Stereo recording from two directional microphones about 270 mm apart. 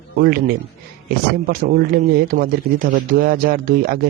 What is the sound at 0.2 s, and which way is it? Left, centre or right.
Speech, right.